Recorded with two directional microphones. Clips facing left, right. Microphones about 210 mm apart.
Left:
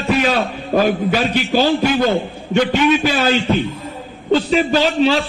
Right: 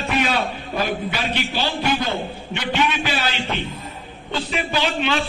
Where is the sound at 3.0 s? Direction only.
40° left (ahead or behind).